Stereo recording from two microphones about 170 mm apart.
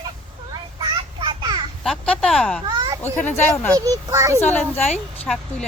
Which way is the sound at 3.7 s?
20° right (ahead or behind).